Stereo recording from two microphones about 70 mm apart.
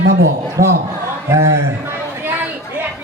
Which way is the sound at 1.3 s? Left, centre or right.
Right.